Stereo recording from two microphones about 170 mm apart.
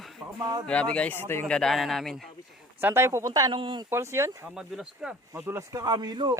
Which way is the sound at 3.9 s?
15° right (ahead or behind).